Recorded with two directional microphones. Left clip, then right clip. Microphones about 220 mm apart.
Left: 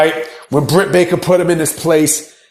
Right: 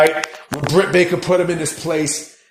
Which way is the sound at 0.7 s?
30° left (ahead or behind).